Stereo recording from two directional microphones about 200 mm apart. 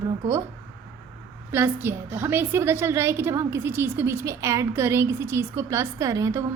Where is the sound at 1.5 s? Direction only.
10° right (ahead or behind).